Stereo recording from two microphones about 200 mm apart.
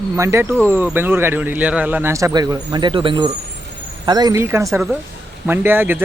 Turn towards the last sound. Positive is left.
turn(degrees=-10)  # may be behind; listen again after turning